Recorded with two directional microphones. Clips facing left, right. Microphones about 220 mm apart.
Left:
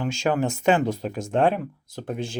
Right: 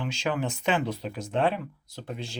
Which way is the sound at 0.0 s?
45° left (ahead or behind).